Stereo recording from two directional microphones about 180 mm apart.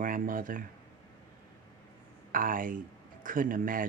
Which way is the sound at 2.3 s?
50° right (ahead or behind).